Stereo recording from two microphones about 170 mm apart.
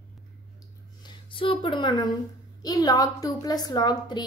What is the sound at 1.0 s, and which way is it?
A woman's voice, 30° left (ahead or behind).